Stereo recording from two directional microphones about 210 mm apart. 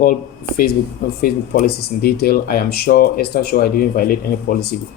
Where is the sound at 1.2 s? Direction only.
45° left (ahead or behind).